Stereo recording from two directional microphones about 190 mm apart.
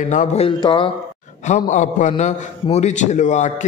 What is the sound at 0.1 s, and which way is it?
Speech, 40° left (ahead or behind).